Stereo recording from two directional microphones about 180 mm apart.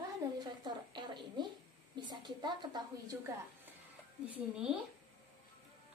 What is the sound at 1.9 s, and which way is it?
A woman's voice, 25° right (ahead or behind).